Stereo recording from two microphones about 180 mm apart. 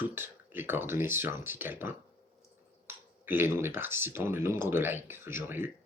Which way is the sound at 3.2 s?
10° right (ahead or behind).